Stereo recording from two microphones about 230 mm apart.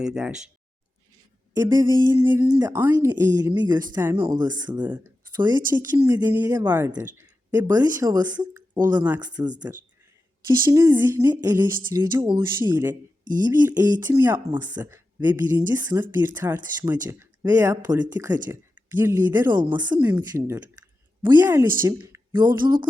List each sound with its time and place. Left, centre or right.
0.0 s speech: centre
1.5 s speech: centre
19.6 s speech: centre